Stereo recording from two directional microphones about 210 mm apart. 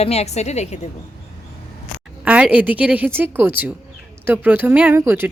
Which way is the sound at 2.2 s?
5° right (ahead or behind).